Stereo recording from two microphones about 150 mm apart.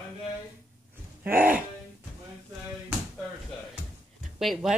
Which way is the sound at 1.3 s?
10° right (ahead or behind).